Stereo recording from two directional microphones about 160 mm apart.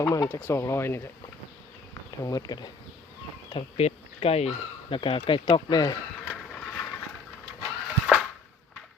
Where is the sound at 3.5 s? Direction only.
40° left (ahead or behind).